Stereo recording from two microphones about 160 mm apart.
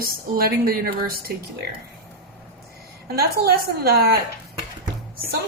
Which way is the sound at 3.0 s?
75° right (ahead or behind).